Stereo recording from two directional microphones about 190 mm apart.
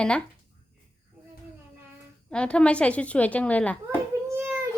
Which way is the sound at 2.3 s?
5° left (ahead or behind).